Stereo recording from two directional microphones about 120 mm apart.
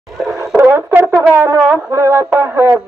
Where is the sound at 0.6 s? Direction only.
20° right (ahead or behind).